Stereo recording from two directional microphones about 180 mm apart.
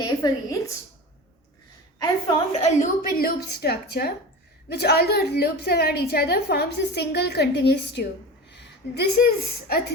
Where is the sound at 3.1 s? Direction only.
60° left (ahead or behind).